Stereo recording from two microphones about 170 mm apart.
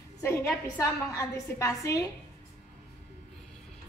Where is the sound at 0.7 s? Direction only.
20° left (ahead or behind).